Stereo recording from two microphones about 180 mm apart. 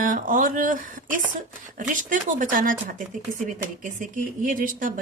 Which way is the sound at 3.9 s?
50° right (ahead or behind).